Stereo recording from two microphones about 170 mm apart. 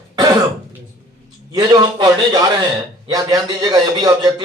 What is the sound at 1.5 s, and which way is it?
A man's voice, 20° right (ahead or behind).